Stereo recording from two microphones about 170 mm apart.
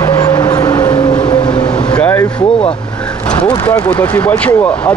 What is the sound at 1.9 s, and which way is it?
Vehicle, 10° left (ahead or behind).